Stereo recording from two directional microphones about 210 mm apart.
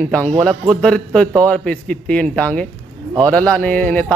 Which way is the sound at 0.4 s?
5° left (ahead or behind).